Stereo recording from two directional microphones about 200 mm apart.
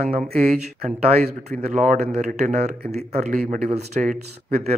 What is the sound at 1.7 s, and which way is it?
A man's voice, 40° right (ahead or behind).